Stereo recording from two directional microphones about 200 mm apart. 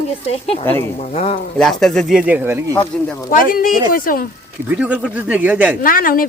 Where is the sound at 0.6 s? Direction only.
10° left (ahead or behind).